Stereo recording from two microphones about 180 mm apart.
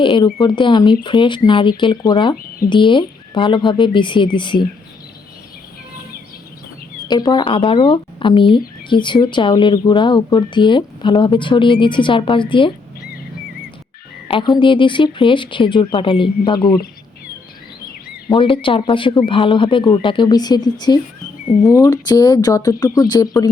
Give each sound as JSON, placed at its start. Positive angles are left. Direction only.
{"t": 0.0, "sound": "speech", "side_deg": 30}
{"t": 7.1, "sound": "speech", "side_deg": 25}
{"t": 14.3, "sound": "speech", "side_deg": 25}
{"t": 18.3, "sound": "speech", "side_deg": 30}